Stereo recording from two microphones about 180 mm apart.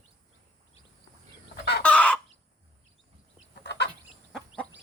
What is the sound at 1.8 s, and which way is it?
Chicken, 5° left (ahead or behind).